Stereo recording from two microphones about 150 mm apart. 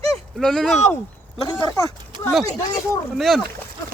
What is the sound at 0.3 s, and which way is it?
Speech, 5° left (ahead or behind).